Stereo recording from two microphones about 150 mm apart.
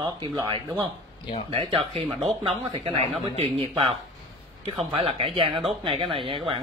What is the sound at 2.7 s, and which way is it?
Speech, 40° right (ahead or behind).